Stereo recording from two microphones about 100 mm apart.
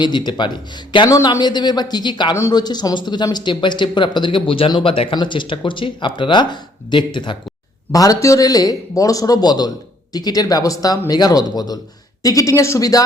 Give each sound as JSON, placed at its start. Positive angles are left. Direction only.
{"t": 0.0, "sound": "speech", "side_deg": 50}
{"t": 1.1, "sound": "speech", "side_deg": 35}
{"t": 7.9, "sound": "speech", "side_deg": 35}